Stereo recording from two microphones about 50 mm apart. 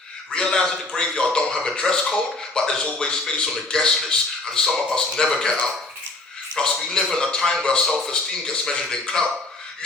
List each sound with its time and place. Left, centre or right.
0.3 s a man's voice: centre